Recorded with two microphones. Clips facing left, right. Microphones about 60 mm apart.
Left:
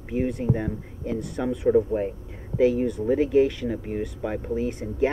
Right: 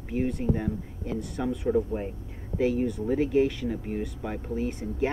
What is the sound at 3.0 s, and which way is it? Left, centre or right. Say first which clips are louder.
Speech: left 4 dB; centre.